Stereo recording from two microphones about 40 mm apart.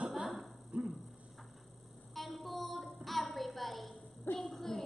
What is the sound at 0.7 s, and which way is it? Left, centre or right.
Dog, right.